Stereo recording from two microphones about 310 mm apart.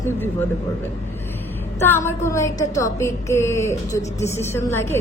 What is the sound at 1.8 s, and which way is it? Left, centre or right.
A woman's voice, centre.